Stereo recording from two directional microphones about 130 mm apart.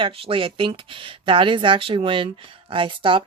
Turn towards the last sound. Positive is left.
turn(degrees=-40)  # may be behind; listen again after turning